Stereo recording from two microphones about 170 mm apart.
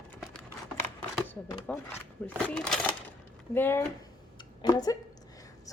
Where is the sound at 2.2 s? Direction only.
5° left (ahead or behind).